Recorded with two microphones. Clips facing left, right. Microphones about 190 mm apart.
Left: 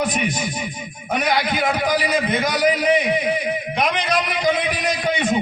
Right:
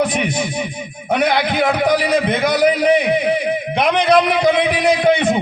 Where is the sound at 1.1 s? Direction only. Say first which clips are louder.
Right 4 dB; 60° right (ahead or behind).